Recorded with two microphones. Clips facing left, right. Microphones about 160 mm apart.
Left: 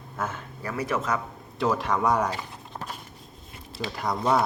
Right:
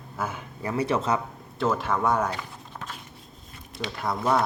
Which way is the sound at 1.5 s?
Centre (ahead or behind).